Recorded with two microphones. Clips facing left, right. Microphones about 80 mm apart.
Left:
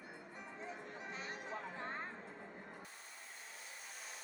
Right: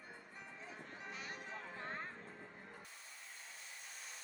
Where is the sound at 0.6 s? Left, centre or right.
Left.